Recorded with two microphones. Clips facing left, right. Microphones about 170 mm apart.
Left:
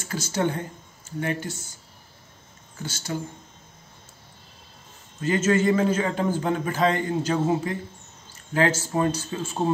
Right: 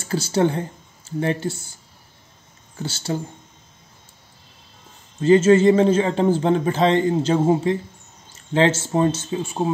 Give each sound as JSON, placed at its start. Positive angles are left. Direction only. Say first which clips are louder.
{"t": 0.0, "sound": "speech", "louder": "right 6 dB", "side_deg": -30}
{"t": 2.8, "sound": "a man's voice", "louder": "right 5 dB", "side_deg": -30}
{"t": 5.2, "sound": "a man's voice", "louder": "right 8 dB", "side_deg": -30}